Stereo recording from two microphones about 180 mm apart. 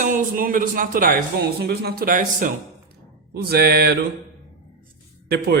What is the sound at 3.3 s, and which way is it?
Speech, 60° right (ahead or behind).